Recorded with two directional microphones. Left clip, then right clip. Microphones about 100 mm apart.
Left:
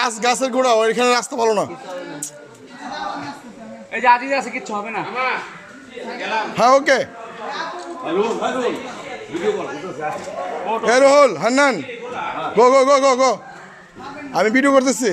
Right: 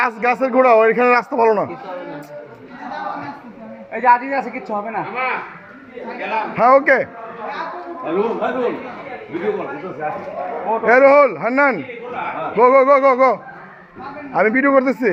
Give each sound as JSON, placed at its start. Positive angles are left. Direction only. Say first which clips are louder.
{"t": 0.0, "sound": "a man's voice", "louder": "right 1 dB", "side_deg": 25}
{"t": 2.8, "sound": "a sound", "louder": "right 1 dB", "side_deg": 15}
{"t": 3.9, "sound": "a man's voice", "louder": "right 1 dB", "side_deg": 5}
{"t": 6.5, "sound": "a man's voice", "louder": "right 2 dB", "side_deg": 25}
{"t": 7.4, "sound": "a man's voice", "louder": "even", "side_deg": 15}